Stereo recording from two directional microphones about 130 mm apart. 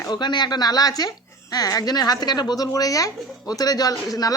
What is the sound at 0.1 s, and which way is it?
A woman's voice, 35° left (ahead or behind).